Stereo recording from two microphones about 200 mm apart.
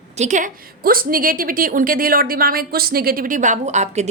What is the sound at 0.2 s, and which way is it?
A woman's voice, 40° right (ahead or behind).